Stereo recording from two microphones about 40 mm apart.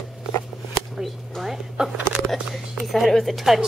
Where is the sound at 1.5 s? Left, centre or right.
Centre.